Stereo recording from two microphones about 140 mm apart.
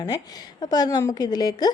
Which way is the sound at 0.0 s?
30° left (ahead or behind).